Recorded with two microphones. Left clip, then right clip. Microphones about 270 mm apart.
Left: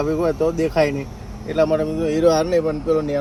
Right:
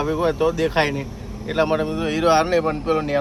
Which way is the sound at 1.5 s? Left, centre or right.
Centre.